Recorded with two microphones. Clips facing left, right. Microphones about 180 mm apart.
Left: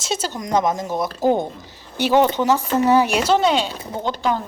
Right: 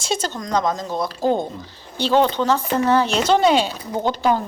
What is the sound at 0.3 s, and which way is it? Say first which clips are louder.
Speech: left 4 dB; 20° left (ahead or behind).